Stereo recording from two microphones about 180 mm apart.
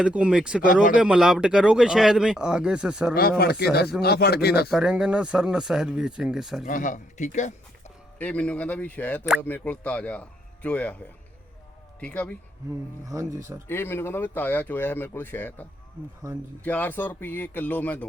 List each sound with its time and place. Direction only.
0.0 s speech: 5° right (ahead or behind)
3.2 s speech: 60° left (ahead or behind)
4.7 s speech: 5° right (ahead or behind)
6.7 s speech: 45° left (ahead or behind)
8.2 s speech: 5° left (ahead or behind)
11.9 s speech: 5° left (ahead or behind)
13.1 s speech: 15° right (ahead or behind)
13.7 s speech: 10° left (ahead or behind)
16.6 s speech: 10° left (ahead or behind)